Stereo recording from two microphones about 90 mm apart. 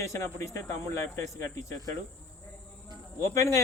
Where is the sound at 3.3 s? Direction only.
35° left (ahead or behind).